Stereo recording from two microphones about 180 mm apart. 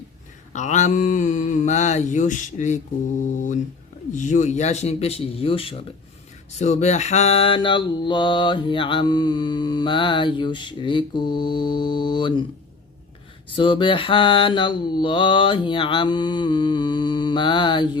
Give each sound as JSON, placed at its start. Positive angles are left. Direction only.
{"t": 0.5, "sound": "speech", "side_deg": 40}
{"t": 4.1, "sound": "speech", "side_deg": 45}
{"t": 6.6, "sound": "mantra", "side_deg": 40}
{"t": 13.6, "sound": "mantra", "side_deg": 25}